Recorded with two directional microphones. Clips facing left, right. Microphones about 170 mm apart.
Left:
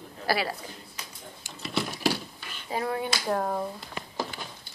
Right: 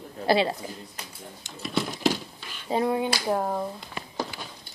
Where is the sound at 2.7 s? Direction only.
20° right (ahead or behind).